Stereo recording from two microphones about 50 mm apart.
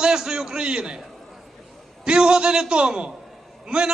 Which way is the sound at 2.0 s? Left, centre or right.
Centre.